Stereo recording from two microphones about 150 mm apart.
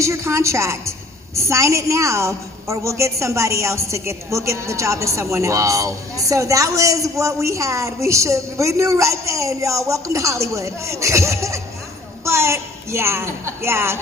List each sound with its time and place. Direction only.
0.0 s a woman's voice: 20° right (ahead or behind)